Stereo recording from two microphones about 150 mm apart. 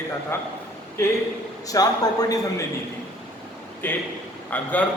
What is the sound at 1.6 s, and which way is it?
Speech, 25° left (ahead or behind).